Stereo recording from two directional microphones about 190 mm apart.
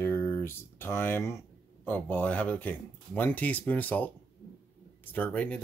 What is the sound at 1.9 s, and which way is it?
Speech, 10° left (ahead or behind).